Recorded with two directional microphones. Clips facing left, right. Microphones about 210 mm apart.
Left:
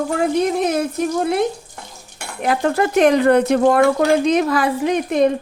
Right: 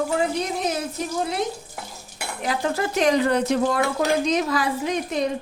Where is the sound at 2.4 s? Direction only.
60° left (ahead or behind).